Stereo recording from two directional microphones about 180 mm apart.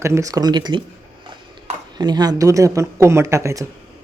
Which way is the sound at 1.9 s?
25° right (ahead or behind).